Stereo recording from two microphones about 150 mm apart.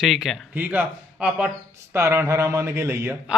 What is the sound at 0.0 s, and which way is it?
Speech, centre (ahead or behind).